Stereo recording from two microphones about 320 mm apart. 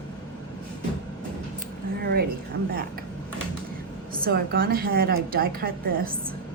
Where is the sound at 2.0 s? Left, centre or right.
Right.